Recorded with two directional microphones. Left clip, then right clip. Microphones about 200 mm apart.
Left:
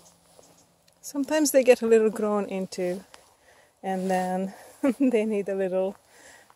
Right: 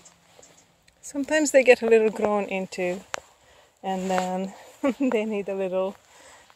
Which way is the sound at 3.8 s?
10° left (ahead or behind).